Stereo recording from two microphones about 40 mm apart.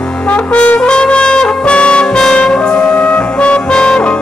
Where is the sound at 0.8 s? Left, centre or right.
Left.